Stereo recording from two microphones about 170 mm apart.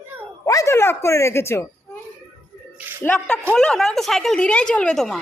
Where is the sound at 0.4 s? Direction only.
20° left (ahead or behind).